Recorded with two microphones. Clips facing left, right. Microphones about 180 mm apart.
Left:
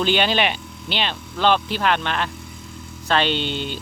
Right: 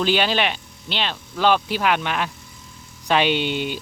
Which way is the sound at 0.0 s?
5° right (ahead or behind).